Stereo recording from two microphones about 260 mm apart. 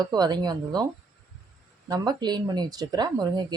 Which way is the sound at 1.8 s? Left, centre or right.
Centre.